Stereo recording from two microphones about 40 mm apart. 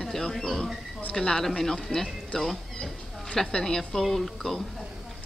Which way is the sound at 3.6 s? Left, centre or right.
Centre.